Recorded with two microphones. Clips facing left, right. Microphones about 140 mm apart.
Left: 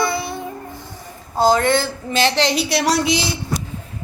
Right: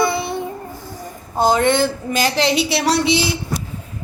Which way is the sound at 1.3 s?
20° right (ahead or behind).